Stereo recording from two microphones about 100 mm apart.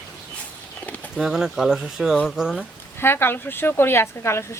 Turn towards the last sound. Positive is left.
turn(degrees=25)  # may be behind; listen again after turning